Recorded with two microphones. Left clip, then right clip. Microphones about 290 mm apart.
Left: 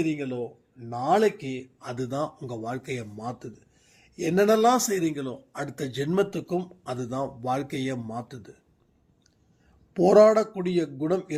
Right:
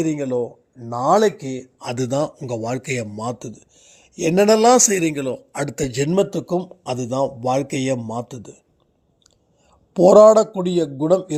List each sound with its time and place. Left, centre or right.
0.1 s a man's voice: right
9.9 s a man's voice: right